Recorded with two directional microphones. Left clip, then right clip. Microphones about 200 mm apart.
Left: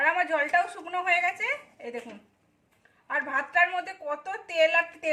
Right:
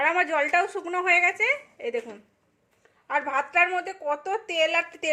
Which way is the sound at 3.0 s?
45° right (ahead or behind).